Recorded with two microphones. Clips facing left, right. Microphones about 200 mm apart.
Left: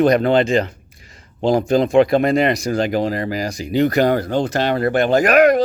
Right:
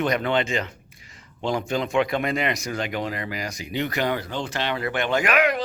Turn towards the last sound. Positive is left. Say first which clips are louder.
# left 9 dB
turn(degrees=45)  # may be behind; listen again after turning